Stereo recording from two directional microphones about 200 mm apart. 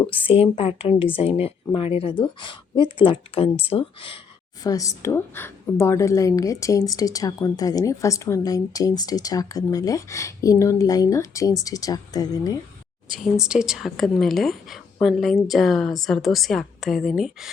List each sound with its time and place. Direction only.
0.1 s a woman's voice: 30° left (ahead or behind)
4.6 s a woman's voice: 15° left (ahead or behind)
13.1 s a woman's voice: centre (ahead or behind)